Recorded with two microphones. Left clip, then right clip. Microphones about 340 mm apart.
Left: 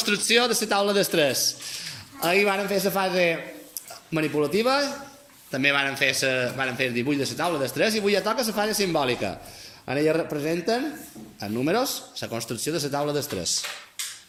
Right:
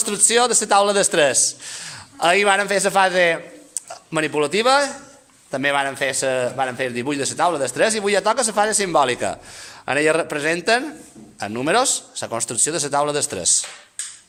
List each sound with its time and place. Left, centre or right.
0.0 s a man's voice: right